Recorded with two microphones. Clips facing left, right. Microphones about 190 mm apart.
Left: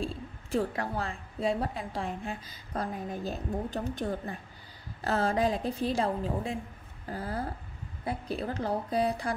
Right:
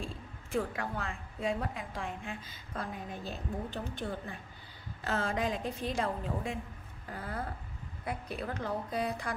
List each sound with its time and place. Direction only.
0.0 s a woman's voice: 35° left (ahead or behind)